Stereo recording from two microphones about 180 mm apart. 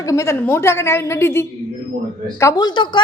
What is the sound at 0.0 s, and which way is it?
A woman's voice, 15° left (ahead or behind).